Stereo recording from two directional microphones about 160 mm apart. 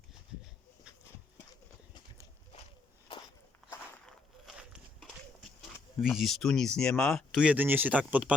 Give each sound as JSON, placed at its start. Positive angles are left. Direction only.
{"t": 3.7, "sound": "walk", "side_deg": 10}
{"t": 4.4, "sound": "walk", "side_deg": -5}
{"t": 6.0, "sound": "speech", "side_deg": 0}